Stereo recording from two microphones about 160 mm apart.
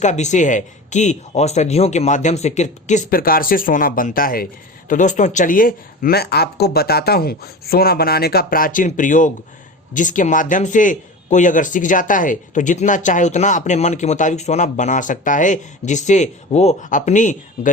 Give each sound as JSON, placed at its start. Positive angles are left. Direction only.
{"t": 0.0, "sound": "a man's voice", "side_deg": 45}
{"t": 4.9, "sound": "a man's voice", "side_deg": 50}